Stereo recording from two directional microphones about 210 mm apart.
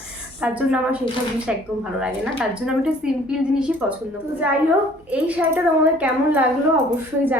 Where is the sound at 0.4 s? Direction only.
5° right (ahead or behind).